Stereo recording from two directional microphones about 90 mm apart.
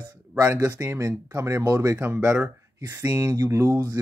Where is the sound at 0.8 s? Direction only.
30° right (ahead or behind).